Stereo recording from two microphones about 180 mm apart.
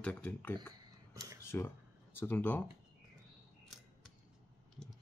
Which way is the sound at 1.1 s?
20° right (ahead or behind).